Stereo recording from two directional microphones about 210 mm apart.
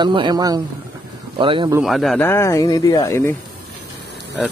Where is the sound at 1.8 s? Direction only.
Centre (ahead or behind).